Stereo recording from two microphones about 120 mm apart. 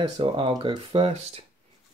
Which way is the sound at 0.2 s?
45° right (ahead or behind).